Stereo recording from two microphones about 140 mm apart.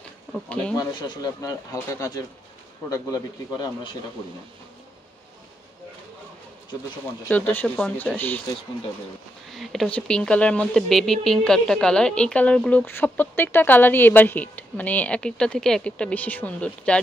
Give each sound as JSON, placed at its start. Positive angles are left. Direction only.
{"t": 0.3, "sound": "speech", "side_deg": 5}
{"t": 0.7, "sound": "speech", "side_deg": 25}
{"t": 7.2, "sound": "speech", "side_deg": 10}
{"t": 9.6, "sound": "speech", "side_deg": 0}